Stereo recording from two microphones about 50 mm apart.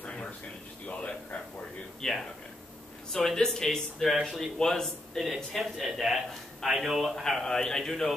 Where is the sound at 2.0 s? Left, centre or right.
Centre.